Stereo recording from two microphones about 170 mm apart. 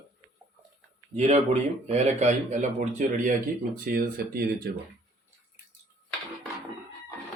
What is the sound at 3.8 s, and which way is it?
Speech, 60° right (ahead or behind).